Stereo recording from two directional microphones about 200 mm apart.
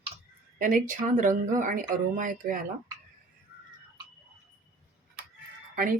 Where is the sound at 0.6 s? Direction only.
40° right (ahead or behind).